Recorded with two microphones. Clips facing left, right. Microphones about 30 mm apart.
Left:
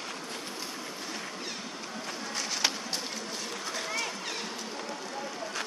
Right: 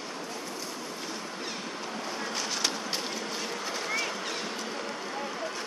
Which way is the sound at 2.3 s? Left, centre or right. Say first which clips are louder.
Even; centre.